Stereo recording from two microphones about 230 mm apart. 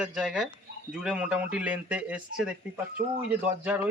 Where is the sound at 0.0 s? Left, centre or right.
Centre.